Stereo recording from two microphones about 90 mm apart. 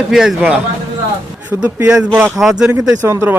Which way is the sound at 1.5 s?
25° right (ahead or behind).